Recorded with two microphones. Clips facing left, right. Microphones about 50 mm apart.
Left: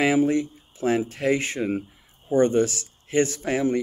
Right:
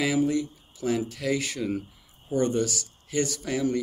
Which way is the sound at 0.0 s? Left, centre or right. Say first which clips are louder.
Left 4 dB; left.